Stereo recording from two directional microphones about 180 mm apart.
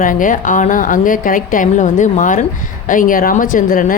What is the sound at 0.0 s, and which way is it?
Speech, 50° left (ahead or behind).